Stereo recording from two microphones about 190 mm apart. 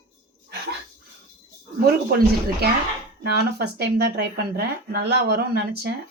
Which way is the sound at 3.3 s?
60° right (ahead or behind).